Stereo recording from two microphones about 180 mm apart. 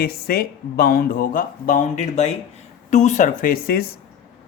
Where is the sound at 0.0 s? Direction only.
55° left (ahead or behind).